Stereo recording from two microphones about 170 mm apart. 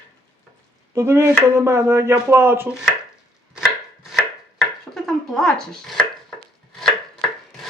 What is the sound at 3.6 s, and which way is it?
Chopping, centre (ahead or behind).